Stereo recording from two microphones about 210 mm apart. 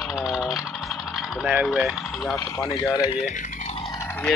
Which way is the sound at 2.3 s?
15° left (ahead or behind).